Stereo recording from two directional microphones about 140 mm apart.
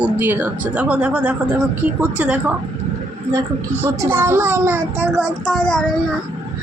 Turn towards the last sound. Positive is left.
turn(degrees=5)  # may be behind; listen again after turning